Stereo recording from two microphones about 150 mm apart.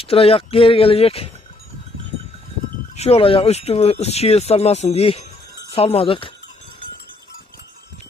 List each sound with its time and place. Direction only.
0.0 s speech: 40° left (ahead or behind)
2.9 s speech: 45° left (ahead or behind)